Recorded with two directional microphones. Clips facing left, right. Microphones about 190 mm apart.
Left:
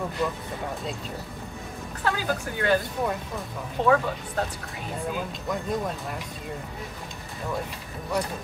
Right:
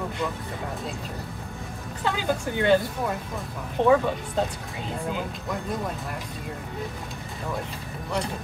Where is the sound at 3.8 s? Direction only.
20° right (ahead or behind).